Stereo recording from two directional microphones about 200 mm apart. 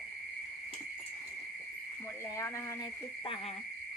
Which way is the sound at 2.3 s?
15° left (ahead or behind).